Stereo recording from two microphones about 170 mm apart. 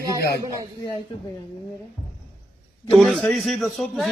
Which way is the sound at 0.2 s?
70° left (ahead or behind).